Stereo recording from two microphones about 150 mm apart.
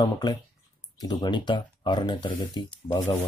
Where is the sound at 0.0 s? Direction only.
30° left (ahead or behind).